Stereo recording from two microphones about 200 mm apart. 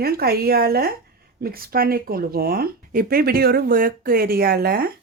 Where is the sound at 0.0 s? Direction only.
50° right (ahead or behind).